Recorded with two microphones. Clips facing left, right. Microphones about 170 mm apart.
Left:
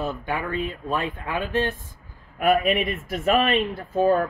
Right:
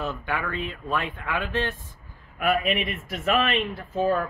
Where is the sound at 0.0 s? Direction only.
15° left (ahead or behind).